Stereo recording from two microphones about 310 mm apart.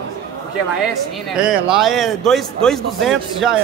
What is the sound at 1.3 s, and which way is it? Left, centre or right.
A man's voice, centre.